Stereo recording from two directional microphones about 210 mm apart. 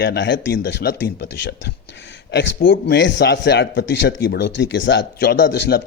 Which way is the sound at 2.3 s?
55° left (ahead or behind).